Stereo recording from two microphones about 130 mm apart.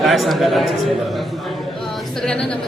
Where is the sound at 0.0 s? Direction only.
Centre (ahead or behind).